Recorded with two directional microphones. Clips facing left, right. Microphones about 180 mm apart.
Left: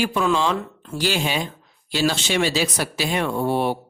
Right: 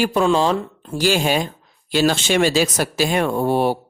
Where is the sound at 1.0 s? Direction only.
45° right (ahead or behind).